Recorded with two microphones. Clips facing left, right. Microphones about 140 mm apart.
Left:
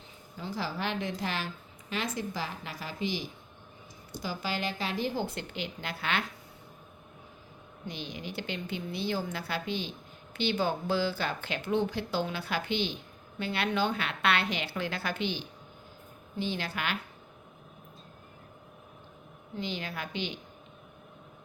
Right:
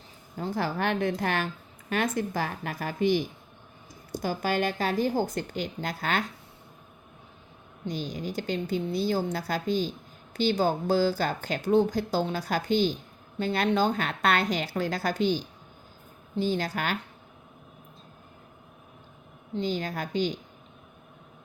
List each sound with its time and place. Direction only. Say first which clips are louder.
0.3 s a woman's voice: right 6 dB; 50° right (ahead or behind)
7.9 s speech: right 7 dB; 40° right (ahead or behind)
19.5 s speech: right 6 dB; 40° right (ahead or behind)